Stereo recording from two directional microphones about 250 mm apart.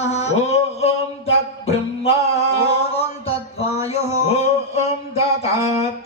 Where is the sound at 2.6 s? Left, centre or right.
Left.